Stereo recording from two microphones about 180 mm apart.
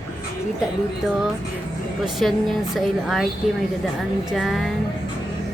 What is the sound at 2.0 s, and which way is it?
Speech, centre (ahead or behind).